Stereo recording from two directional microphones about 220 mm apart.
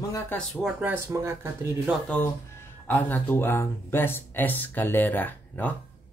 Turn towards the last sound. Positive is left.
turn(degrees=10)  # may be behind; listen again after turning